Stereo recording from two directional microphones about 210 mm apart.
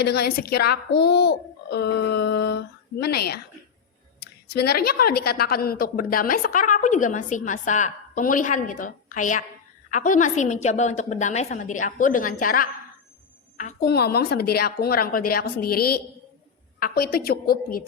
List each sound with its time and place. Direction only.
0.0 s a child's voice: 50° left (ahead or behind)